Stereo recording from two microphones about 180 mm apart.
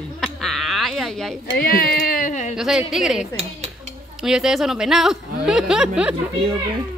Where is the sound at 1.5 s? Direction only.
55° left (ahead or behind).